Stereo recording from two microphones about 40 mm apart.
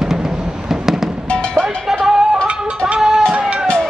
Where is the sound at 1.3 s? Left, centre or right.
Left.